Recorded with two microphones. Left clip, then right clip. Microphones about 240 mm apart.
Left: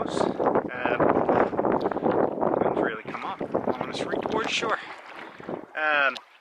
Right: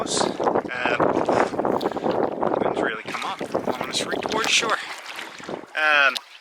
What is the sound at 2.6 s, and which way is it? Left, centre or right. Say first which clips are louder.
Boat: right 2 dB; centre.